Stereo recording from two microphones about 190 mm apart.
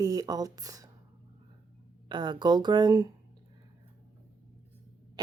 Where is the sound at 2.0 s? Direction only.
25° right (ahead or behind).